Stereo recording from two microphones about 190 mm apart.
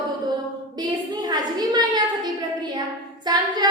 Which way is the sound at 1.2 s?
20° right (ahead or behind).